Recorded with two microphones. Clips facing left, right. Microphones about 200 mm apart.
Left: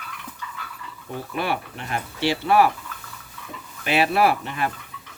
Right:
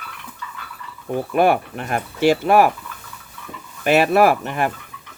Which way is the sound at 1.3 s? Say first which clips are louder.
Right 10 dB; 50° right (ahead or behind).